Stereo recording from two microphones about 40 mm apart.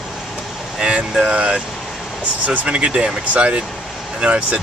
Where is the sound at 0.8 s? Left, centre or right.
Right.